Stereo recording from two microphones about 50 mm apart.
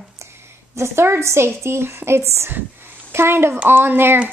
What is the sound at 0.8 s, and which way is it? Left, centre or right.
A woman's voice, right.